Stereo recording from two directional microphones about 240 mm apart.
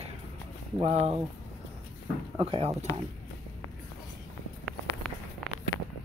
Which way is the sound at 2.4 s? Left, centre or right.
Right.